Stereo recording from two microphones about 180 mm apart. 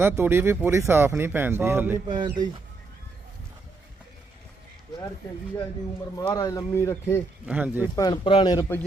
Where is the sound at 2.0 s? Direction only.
25° right (ahead or behind).